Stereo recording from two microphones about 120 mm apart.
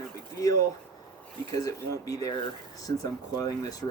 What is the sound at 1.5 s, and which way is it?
Speech, 30° left (ahead or behind).